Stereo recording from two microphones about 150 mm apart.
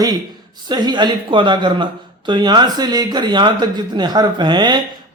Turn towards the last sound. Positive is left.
turn(degrees=-30)  # may be behind; listen again after turning